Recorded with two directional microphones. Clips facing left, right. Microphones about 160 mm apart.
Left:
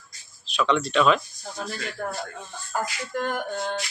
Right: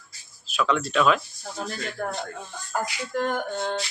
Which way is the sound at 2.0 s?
5° right (ahead or behind).